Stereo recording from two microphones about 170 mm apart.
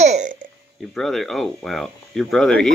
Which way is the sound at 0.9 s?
Centre (ahead or behind).